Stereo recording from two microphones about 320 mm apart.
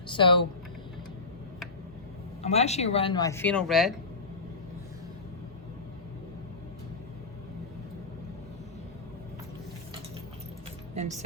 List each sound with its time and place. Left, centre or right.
0.1 s speech: centre
2.4 s speech: centre
10.9 s speech: right